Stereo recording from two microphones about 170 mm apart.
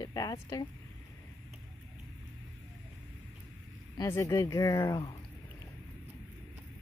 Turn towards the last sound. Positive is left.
turn(degrees=20)  # may be behind; listen again after turning